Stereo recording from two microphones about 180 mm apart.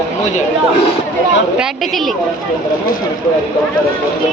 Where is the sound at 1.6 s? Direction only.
Centre (ahead or behind).